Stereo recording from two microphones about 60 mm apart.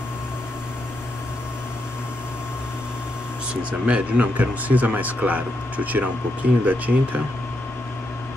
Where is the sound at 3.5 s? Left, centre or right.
Centre.